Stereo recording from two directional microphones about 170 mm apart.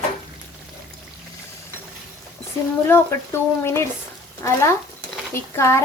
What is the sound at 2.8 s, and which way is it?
Speech, 15° left (ahead or behind).